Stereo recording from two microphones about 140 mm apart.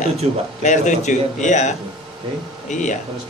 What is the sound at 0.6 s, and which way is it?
Speech, 60° left (ahead or behind).